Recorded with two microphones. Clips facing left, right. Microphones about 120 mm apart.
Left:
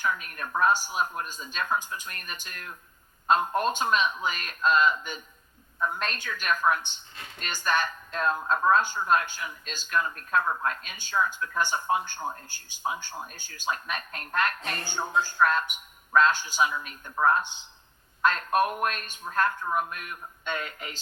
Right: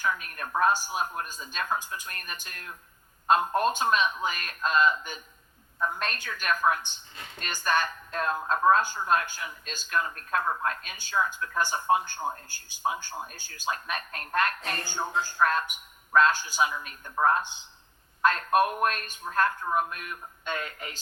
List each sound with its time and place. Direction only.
0.0 s speech: 40° right (ahead or behind)